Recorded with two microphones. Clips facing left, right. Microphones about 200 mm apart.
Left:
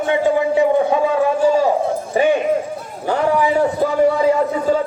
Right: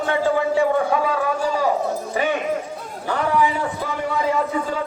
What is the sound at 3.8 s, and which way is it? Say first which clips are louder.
Speech: left 9 dB; 40° left (ahead or behind).